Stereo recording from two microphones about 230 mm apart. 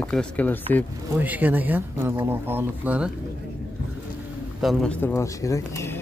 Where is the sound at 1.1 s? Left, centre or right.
Centre.